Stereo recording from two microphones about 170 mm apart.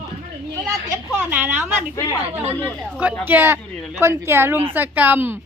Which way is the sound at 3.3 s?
10° right (ahead or behind).